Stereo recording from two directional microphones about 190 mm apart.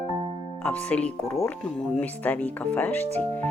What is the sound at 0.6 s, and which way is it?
Speech, 5° left (ahead or behind).